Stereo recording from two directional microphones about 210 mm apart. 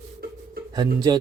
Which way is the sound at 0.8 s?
20° right (ahead or behind).